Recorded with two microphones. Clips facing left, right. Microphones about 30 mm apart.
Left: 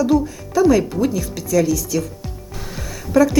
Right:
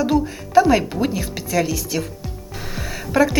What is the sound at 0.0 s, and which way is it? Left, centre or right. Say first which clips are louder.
Speech: left 2 dB; right.